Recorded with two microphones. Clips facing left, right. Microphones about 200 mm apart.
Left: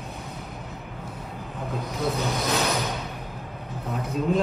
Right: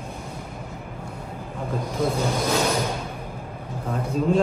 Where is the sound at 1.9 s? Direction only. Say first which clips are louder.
Right 3 dB; 30° right (ahead or behind).